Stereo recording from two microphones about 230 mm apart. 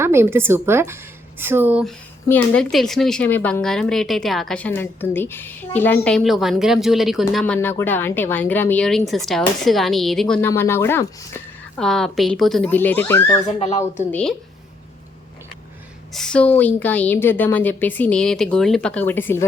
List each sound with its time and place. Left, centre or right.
0.0 s speech: centre
2.3 s a woman's voice: centre
13.6 s speech: left
14.1 s a woman's voice: centre
16.1 s a woman's voice: centre